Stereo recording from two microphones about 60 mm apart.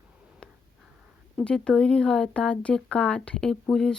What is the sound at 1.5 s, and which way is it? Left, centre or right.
Speech, centre.